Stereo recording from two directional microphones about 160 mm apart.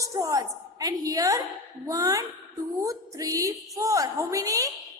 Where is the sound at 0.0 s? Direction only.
20° right (ahead or behind).